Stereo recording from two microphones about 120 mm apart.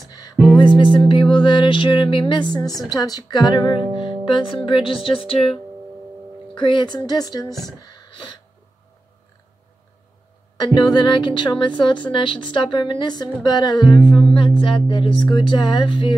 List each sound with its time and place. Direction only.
1.0 s sine wave: 40° left (ahead or behind)
2.5 s speech: 35° left (ahead or behind)
4.6 s sine wave: 45° left (ahead or behind)
6.5 s speech: 40° left (ahead or behind)
7.8 s a sound: 35° left (ahead or behind)
10.6 s speech: 35° left (ahead or behind)
14.3 s sine wave: 45° left (ahead or behind)